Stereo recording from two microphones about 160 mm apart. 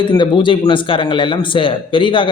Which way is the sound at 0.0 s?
30° left (ahead or behind).